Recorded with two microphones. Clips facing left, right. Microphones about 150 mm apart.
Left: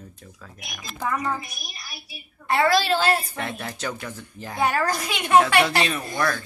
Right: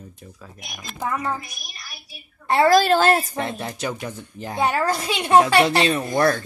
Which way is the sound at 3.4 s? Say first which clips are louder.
Right 4 dB; 20° right (ahead or behind).